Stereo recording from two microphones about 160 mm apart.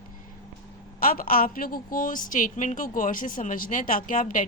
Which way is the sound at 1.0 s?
60° left (ahead or behind).